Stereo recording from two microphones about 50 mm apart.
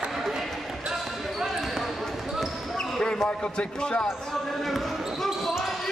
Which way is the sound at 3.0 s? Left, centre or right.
Centre.